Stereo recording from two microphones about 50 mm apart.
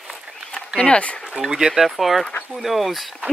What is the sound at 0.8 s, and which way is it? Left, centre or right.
Speech, left.